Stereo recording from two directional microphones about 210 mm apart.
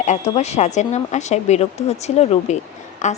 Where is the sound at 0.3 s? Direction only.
30° left (ahead or behind).